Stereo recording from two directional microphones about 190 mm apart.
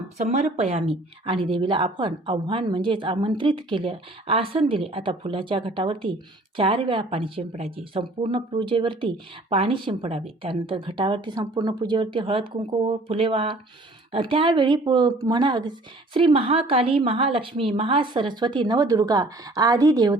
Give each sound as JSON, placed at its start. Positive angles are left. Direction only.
{"t": 0.2, "sound": "speech", "side_deg": -35}